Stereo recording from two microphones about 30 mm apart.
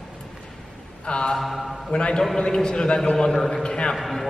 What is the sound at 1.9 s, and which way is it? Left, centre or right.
Mantra, left.